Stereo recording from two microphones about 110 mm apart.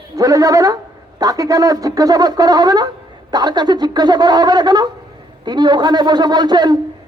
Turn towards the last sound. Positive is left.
turn(degrees=-40)  # may be behind; listen again after turning